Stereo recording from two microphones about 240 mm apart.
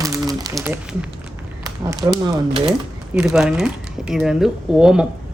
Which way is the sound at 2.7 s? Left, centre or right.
Centre.